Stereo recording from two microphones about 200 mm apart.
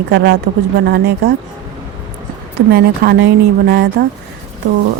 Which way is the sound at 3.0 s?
50° right (ahead or behind).